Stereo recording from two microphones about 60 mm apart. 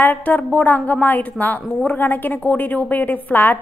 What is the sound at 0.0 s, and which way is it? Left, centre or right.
A woman's voice, left.